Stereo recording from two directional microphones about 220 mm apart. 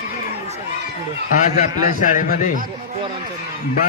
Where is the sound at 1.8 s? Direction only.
35° left (ahead or behind).